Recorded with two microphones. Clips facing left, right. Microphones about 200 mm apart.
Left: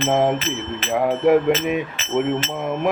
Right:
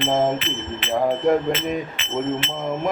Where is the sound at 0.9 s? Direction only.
5° left (ahead or behind).